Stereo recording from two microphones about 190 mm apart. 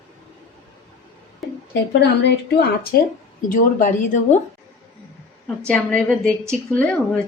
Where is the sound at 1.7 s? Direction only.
60° left (ahead or behind).